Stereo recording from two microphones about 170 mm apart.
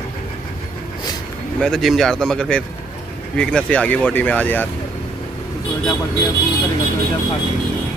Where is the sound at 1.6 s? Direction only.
Centre (ahead or behind).